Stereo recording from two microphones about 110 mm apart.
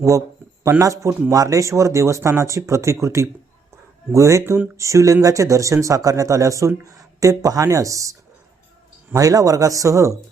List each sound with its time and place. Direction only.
0.6 s a man's voice: 25° right (ahead or behind)